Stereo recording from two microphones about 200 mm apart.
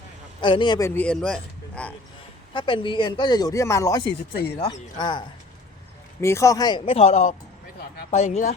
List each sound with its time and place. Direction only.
0.4 s a man's voice: 25° left (ahead or behind); by 1.9 s 5° left (ahead or behind)
2.5 s speech: 25° left (ahead or behind)